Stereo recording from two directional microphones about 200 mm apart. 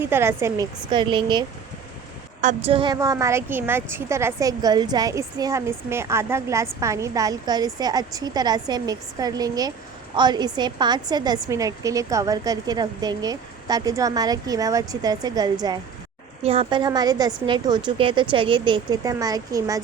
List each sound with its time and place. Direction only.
0.0 s a woman's voice: 10° right (ahead or behind)
2.4 s a woman's voice: 35° right (ahead or behind)
2.7 s a woman's voice: 20° right (ahead or behind)